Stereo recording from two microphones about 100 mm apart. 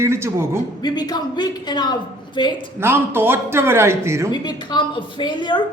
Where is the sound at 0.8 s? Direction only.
45° left (ahead or behind).